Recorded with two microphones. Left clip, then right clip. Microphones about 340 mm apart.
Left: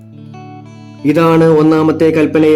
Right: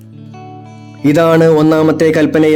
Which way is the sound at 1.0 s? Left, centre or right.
Centre.